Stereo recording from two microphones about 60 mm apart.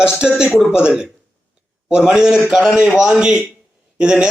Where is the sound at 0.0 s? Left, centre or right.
Centre.